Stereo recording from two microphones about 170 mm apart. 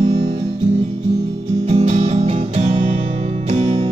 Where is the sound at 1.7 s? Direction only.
40° right (ahead or behind).